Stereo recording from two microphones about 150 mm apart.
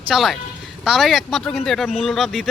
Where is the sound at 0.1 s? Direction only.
Centre (ahead or behind).